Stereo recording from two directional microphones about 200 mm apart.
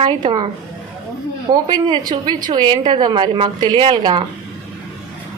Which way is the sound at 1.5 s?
20° right (ahead or behind).